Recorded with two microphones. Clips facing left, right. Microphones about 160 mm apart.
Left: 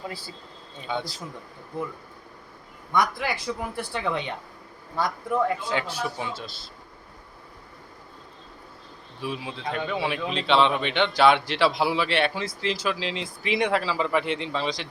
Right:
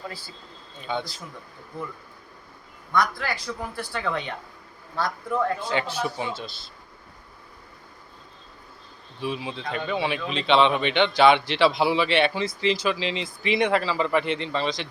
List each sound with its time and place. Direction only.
0.9 s a man's voice: 5° left (ahead or behind)
2.9 s a man's voice: 20° left (ahead or behind)
9.2 s speech: 5° left (ahead or behind)